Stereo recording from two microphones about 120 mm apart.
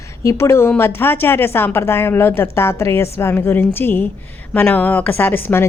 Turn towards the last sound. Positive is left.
turn(degrees=15)  # may be behind; listen again after turning